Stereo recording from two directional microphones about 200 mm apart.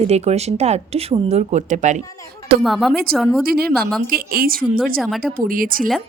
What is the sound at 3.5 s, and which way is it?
A woman's voice, 50° right (ahead or behind).